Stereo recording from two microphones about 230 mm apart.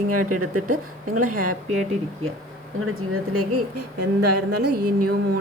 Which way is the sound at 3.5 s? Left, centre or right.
Right.